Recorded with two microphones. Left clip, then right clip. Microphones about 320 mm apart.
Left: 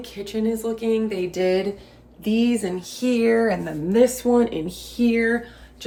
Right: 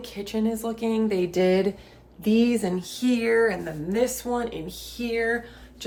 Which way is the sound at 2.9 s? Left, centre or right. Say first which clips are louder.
Left 5 dB; centre.